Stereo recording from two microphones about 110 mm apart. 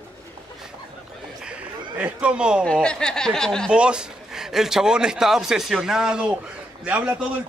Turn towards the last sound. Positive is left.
turn(degrees=-10)  # may be behind; listen again after turning